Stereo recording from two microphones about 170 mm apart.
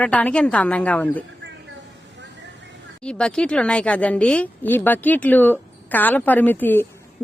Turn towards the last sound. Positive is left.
turn(degrees=10)  # may be behind; listen again after turning